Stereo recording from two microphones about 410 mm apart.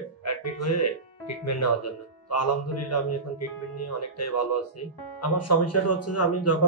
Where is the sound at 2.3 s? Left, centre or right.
Left.